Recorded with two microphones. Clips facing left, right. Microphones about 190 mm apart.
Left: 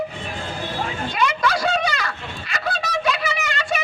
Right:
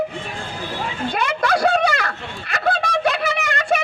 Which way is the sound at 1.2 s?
55° right (ahead or behind).